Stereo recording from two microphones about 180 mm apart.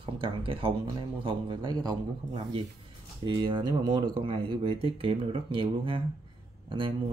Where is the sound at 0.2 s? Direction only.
30° right (ahead or behind).